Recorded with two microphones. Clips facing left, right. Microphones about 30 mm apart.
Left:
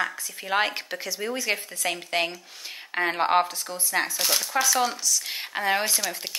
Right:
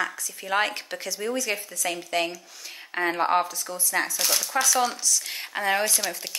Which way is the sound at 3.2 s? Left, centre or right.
Left.